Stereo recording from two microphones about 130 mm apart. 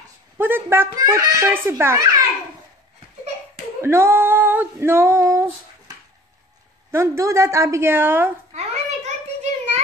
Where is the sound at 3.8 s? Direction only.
20° right (ahead or behind).